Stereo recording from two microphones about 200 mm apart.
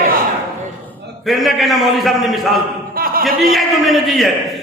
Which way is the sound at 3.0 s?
45° right (ahead or behind).